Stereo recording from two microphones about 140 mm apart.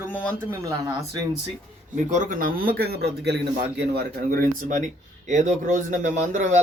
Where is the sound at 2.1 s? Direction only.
65° right (ahead or behind).